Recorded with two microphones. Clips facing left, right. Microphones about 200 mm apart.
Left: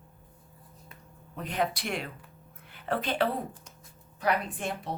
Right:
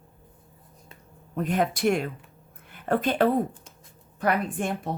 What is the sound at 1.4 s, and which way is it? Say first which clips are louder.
A woman's voice: right 6 dB; 50° right (ahead or behind).